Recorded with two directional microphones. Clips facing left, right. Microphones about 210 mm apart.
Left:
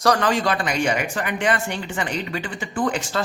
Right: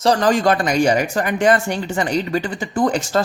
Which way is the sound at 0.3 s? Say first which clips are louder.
Right 5 dB; 45° right (ahead or behind).